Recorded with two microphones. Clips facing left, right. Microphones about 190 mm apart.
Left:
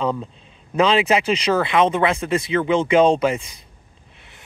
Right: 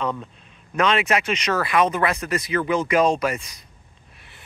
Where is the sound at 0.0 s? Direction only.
30° left (ahead or behind).